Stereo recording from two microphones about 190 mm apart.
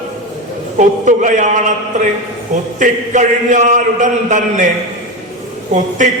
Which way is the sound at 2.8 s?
40° right (ahead or behind).